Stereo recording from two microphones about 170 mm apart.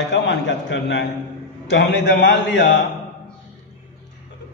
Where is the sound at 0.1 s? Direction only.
90° left.